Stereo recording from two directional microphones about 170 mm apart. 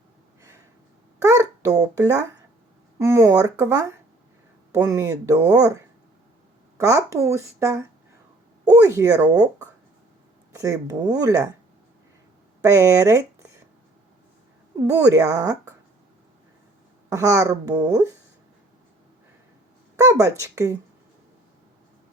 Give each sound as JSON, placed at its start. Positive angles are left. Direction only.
{"t": 1.2, "sound": "babbling", "side_deg": -20}
{"t": 3.0, "sound": "speech", "side_deg": -15}
{"t": 12.6, "sound": "speech", "side_deg": -20}
{"t": 15.0, "sound": "speech", "side_deg": -20}
{"t": 17.1, "sound": "speech", "side_deg": -20}
{"t": 20.0, "sound": "speech", "side_deg": -20}